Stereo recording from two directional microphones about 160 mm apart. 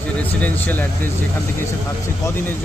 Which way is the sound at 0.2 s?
10° left (ahead or behind).